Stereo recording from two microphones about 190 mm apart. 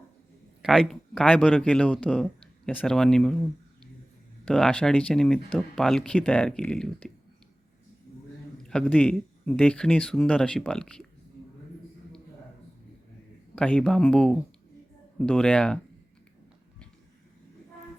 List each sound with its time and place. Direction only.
0.6 s speech: centre (ahead or behind)
4.4 s speech: 5° left (ahead or behind)
8.6 s speech: 5° left (ahead or behind)
13.6 s speech: 5° left (ahead or behind)